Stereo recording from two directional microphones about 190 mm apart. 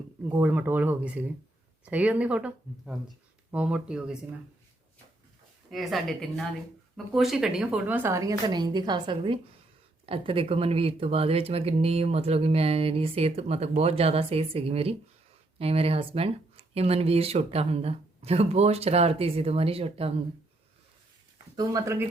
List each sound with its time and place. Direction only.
0.3 s a woman's voice: 10° right (ahead or behind)
5.7 s a woman's voice: centre (ahead or behind); by 20.1 s 30° right (ahead or behind)
21.5 s speech: 20° right (ahead or behind)